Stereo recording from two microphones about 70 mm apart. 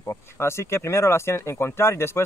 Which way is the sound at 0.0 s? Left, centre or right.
Left.